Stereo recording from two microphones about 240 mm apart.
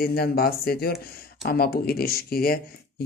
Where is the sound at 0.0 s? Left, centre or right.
Left.